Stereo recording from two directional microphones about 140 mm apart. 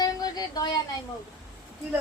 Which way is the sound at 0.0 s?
25° left (ahead or behind).